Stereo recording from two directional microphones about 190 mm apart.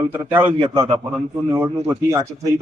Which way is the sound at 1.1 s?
10° right (ahead or behind).